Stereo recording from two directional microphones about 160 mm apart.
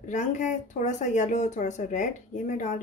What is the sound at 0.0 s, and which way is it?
Speech, 50° left (ahead or behind).